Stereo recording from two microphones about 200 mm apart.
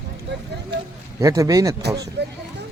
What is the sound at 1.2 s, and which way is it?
Speech, 15° right (ahead or behind).